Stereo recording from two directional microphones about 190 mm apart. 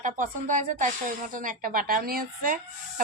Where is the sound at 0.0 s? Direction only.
40° right (ahead or behind).